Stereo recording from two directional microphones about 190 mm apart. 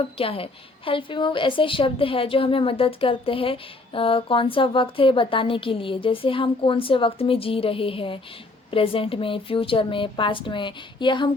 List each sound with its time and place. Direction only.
0.0 s a woman's voice: 30° left (ahead or behind)